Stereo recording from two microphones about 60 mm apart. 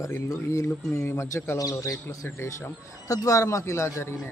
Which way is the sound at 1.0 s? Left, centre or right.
Left.